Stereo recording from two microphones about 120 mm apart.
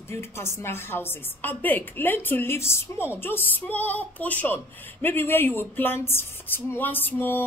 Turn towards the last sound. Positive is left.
turn(degrees=15)  # may be behind; listen again after turning